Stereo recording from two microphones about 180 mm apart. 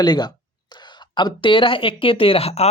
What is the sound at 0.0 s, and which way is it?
Speech, 25° left (ahead or behind).